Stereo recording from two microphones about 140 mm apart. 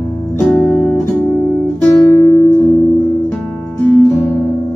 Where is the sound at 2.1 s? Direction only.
20° left (ahead or behind).